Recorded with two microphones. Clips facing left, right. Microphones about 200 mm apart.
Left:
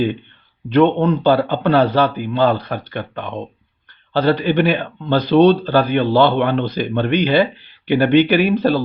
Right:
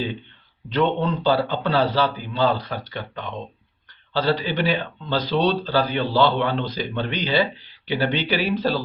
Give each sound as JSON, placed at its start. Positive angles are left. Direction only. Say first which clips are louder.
{"t": 0.7, "sound": "speech", "louder": "left 8 dB", "side_deg": 55}